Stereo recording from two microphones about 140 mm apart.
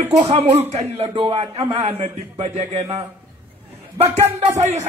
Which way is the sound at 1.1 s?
35° right (ahead or behind).